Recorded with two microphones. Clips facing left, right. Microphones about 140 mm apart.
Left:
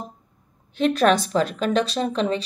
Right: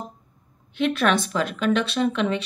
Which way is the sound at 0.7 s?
40° left (ahead or behind).